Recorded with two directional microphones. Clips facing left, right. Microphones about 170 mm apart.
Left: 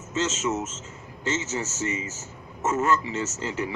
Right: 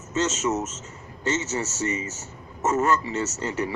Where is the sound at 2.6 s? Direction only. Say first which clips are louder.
Right 1 dB; 40° right (ahead or behind).